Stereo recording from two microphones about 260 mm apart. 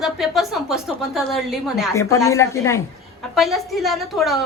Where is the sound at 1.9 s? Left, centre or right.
Centre.